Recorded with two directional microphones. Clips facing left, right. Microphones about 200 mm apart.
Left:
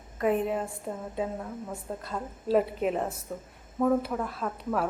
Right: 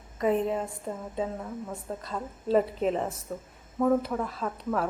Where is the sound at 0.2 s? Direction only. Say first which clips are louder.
Right 1 dB; 5° left (ahead or behind).